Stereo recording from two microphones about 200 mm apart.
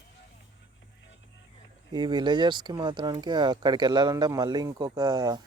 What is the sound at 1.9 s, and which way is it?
Speech, 20° right (ahead or behind).